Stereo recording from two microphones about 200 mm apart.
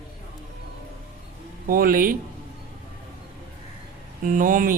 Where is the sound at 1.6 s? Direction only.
45° right (ahead or behind).